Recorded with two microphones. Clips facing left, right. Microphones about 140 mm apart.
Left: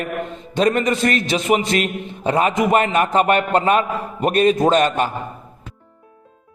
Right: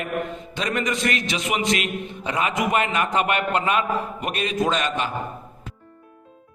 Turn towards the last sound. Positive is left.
turn(degrees=45)  # may be behind; listen again after turning